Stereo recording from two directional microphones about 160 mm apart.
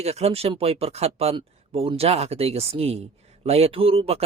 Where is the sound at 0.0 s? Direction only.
40° right (ahead or behind).